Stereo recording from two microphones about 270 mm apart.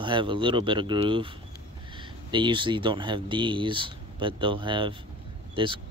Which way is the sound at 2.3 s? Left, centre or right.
Centre.